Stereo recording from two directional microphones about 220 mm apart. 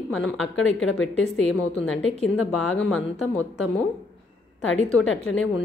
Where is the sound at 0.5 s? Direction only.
65° left (ahead or behind).